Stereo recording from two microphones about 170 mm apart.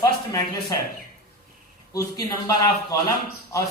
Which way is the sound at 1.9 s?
20° left (ahead or behind).